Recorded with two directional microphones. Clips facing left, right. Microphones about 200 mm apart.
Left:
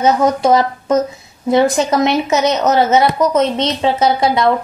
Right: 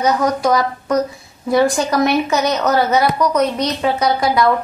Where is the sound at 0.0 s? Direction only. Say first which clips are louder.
Left 3 dB; 25° left (ahead or behind).